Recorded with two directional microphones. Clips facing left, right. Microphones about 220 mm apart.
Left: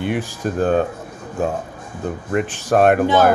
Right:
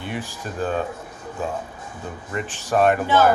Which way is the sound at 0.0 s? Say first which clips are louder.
Left 8 dB; 55° left (ahead or behind).